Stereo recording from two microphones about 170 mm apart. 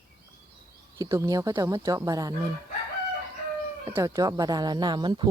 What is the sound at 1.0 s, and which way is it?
Speech, 20° right (ahead or behind).